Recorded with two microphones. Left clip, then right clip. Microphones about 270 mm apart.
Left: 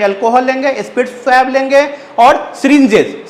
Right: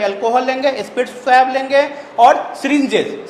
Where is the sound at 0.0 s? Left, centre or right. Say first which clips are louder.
Left 5 dB; left.